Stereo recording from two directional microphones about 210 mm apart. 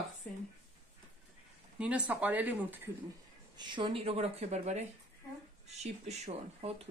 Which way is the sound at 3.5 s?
20° right (ahead or behind).